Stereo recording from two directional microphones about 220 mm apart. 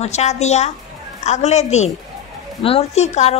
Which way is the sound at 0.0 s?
30° left (ahead or behind).